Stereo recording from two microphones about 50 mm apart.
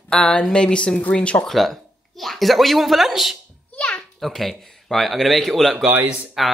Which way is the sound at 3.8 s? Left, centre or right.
Centre.